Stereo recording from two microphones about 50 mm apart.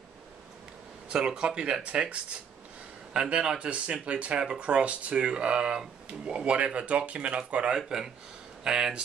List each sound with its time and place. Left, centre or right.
1.0 s speech: centre
7.7 s speech: centre